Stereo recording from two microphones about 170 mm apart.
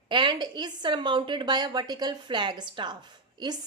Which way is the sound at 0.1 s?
25° right (ahead or behind).